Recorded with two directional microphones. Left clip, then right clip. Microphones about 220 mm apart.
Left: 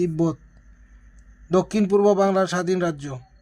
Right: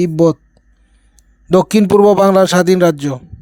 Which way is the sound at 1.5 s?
40° right (ahead or behind).